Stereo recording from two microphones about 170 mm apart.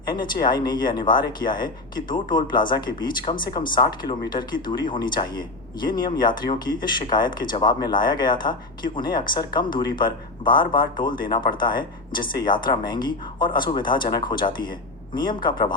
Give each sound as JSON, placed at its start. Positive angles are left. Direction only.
{"t": 0.1, "sound": "speech", "side_deg": 25}